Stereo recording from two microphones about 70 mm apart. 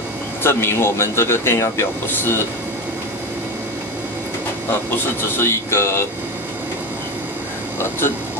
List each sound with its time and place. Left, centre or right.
0.4 s speech: left
5.4 s speech: left